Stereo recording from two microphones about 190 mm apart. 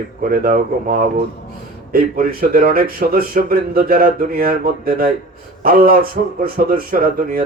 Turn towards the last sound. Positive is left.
turn(degrees=-50)  # may be behind; listen again after turning